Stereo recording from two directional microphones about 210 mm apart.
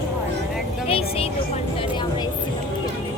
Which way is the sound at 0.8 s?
25° left (ahead or behind).